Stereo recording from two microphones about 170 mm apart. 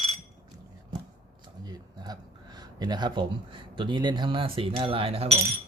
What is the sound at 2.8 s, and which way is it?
Speech, 25° right (ahead or behind).